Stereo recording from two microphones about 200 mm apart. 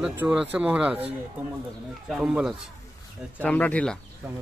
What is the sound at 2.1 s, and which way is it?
Speech, centre (ahead or behind).